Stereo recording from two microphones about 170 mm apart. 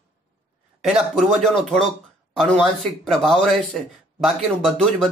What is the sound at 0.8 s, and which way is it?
Speech, centre (ahead or behind).